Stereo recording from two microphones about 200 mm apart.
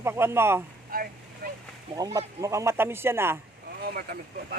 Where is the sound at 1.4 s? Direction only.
45° right (ahead or behind).